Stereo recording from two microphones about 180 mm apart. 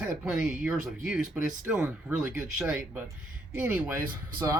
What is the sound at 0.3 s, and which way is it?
Speech, centre (ahead or behind).